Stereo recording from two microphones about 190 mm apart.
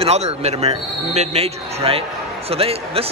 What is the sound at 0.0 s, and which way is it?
A man's voice, 35° right (ahead or behind).